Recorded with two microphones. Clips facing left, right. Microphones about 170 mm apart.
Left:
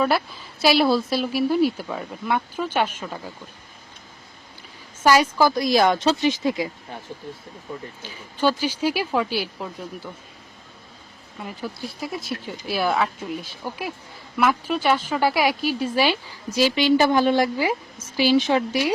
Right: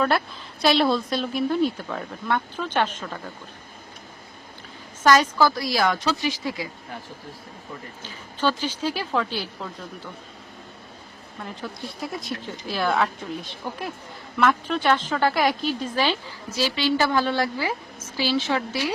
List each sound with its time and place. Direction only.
0.6 s a woman's voice: 5° left (ahead or behind)
5.0 s speech: 10° left (ahead or behind)
8.0 s a woman's voice: 10° left (ahead or behind)
11.4 s a woman's voice: 5° left (ahead or behind)